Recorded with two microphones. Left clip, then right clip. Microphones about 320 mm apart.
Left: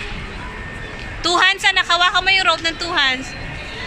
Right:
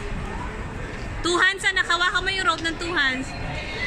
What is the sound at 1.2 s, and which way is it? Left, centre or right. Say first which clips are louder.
A woman's voice: left 5 dB; centre.